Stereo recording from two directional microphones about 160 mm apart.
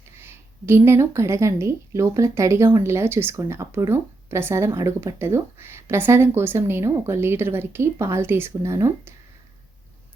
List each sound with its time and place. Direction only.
0.2 s a woman's voice: 15° right (ahead or behind)